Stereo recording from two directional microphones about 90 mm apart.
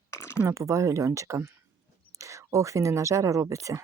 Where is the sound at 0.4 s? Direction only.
35° right (ahead or behind).